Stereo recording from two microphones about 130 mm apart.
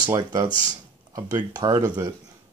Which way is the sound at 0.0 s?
30° right (ahead or behind).